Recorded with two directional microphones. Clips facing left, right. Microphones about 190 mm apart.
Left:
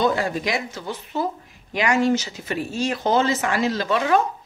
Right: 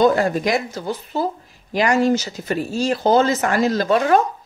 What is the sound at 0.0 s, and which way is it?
Speech, 50° right (ahead or behind).